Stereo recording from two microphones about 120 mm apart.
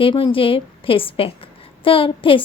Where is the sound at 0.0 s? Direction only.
45° left (ahead or behind).